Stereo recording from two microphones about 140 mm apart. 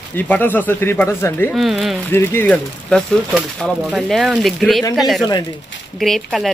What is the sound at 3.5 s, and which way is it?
Speech, centre (ahead or behind).